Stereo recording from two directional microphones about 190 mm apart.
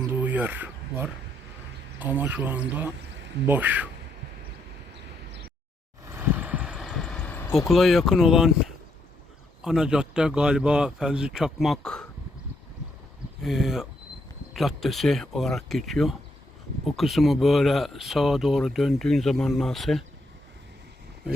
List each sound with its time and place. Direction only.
0.2 s a sound: 10° right (ahead or behind)
2.0 s speech: 10° right (ahead or behind)
6.1 s vehicle: 10° right (ahead or behind); by 7.5 s 10° left (ahead or behind)
7.7 s speech: centre (ahead or behind)
13.4 s speech: centre (ahead or behind)